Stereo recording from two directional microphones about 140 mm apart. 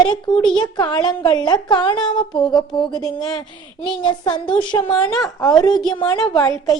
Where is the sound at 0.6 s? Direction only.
30° left (ahead or behind).